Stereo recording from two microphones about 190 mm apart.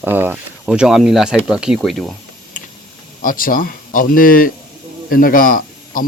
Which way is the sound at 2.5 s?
45° left (ahead or behind).